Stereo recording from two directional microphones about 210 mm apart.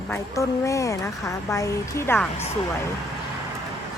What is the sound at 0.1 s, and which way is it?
Speech, 15° left (ahead or behind).